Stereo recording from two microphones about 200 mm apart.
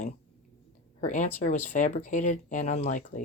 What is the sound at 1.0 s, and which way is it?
Speech, 40° left (ahead or behind).